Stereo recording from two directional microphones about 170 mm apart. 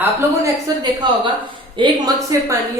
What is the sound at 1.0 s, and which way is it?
A woman's voice, 25° right (ahead or behind).